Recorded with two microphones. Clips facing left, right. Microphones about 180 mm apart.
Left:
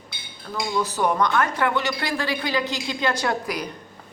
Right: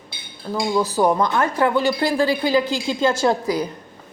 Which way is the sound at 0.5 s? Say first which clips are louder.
Right 5 dB; 35° right (ahead or behind).